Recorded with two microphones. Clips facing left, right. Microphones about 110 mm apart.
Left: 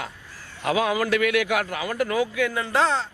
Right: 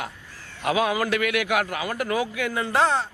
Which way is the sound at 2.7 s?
20° right (ahead or behind).